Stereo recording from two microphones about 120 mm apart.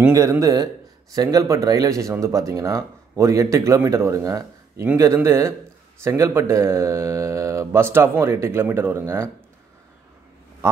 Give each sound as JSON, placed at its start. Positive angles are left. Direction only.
{"t": 0.1, "sound": "speech", "side_deg": -25}